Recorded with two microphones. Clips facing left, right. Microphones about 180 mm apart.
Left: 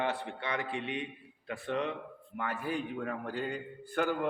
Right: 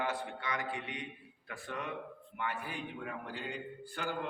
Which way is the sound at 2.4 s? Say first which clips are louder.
Left 5 dB; 40° left (ahead or behind).